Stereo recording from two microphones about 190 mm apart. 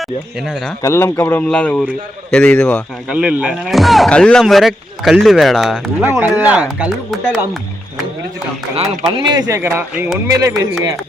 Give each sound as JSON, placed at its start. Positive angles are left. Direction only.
{"t": 0.0, "sound": "speech", "side_deg": 0}
{"t": 0.8, "sound": "a man's voice", "side_deg": 15}
{"t": 3.2, "sound": "speech", "side_deg": -5}
{"t": 8.7, "sound": "speech", "side_deg": -25}